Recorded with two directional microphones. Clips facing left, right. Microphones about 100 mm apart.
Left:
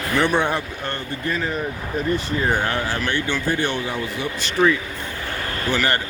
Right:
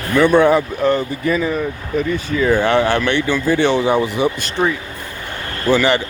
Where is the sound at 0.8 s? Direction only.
90° right.